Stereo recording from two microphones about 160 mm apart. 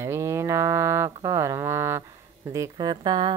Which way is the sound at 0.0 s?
20° right (ahead or behind).